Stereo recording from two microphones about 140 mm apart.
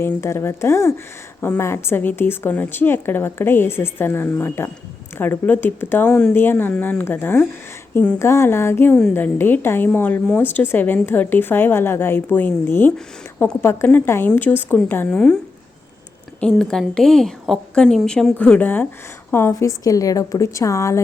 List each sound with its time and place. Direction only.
0.0 s a woman's voice: 20° left (ahead or behind)
8.2 s a woman's voice: 20° left (ahead or behind)
16.4 s a woman's voice: 5° left (ahead or behind); by 21.0 s 20° left (ahead or behind)